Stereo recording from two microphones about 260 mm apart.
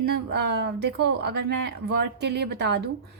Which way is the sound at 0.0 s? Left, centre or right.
Right.